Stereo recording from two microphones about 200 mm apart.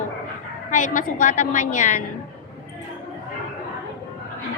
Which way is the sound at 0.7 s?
40° left (ahead or behind).